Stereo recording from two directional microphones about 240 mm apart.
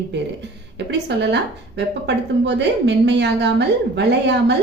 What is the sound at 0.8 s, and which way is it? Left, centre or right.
A woman's voice, right.